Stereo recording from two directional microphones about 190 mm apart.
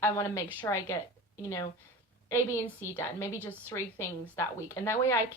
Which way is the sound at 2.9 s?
15° left (ahead or behind).